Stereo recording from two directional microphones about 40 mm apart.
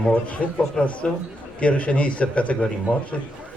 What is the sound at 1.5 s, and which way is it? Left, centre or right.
A man's voice, left.